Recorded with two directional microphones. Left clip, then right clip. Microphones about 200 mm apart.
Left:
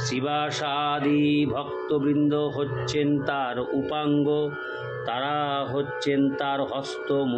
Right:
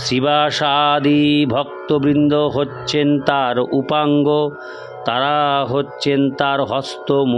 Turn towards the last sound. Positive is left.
turn(degrees=-50)  # may be behind; listen again after turning